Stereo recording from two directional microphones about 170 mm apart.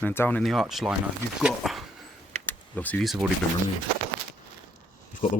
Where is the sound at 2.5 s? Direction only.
10° left (ahead or behind).